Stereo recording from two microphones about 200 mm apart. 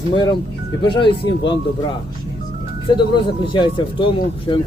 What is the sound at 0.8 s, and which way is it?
Speech, 25° left (ahead or behind).